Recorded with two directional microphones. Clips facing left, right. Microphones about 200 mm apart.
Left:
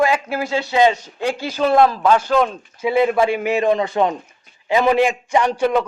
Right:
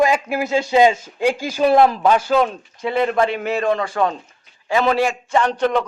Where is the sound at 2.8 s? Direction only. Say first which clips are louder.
Left 2 dB; 10° left (ahead or behind).